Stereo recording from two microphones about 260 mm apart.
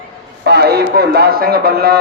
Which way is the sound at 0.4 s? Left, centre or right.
Right.